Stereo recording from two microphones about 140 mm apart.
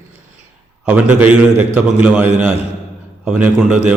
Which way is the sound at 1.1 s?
10° right (ahead or behind).